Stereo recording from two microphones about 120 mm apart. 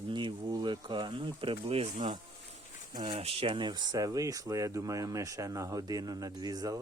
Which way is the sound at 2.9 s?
40° right (ahead or behind).